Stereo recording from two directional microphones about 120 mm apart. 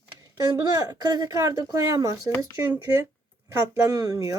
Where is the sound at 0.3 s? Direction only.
30° right (ahead or behind).